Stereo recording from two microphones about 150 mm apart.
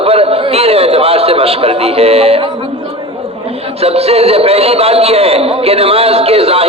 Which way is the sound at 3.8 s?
40° right (ahead or behind).